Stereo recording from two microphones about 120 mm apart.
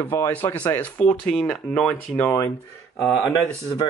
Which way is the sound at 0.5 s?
15° left (ahead or behind).